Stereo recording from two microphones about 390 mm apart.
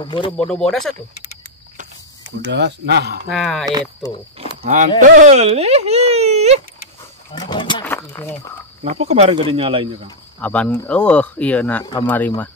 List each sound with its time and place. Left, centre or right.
0.0 s speech: centre
0.5 s speech: centre
2.5 s speech: right
3.3 s speech: centre
4.4 s speech: centre
7.3 s wild animals: centre
8.8 s speech: centre
10.0 s speech: centre